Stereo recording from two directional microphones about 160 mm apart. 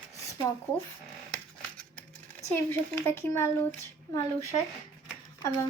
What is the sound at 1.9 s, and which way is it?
Speech, 10° left (ahead or behind).